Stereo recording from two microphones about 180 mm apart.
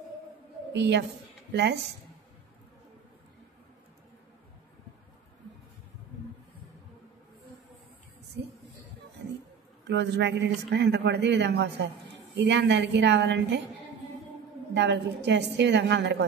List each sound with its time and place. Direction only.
0.7 s a woman's voice: 70° right (ahead or behind)
9.8 s a woman's voice: 70° right (ahead or behind)
14.7 s a woman's voice: 75° right (ahead or behind)